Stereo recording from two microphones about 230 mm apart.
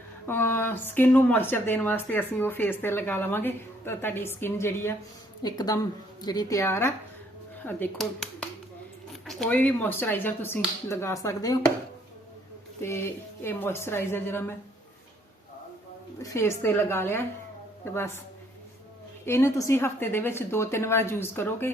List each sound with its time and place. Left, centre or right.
0.3 s speech: centre
12.8 s speech: centre
16.2 s speech: centre
19.2 s speech: centre